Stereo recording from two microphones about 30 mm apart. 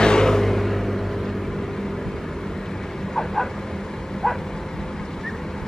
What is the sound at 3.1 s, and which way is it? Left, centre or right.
Bow-wow, centre.